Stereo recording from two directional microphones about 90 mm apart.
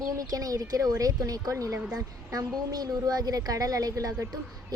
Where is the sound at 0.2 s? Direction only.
45° right (ahead or behind).